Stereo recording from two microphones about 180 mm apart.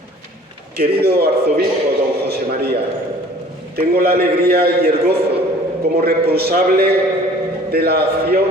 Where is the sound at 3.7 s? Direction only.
60° right (ahead or behind).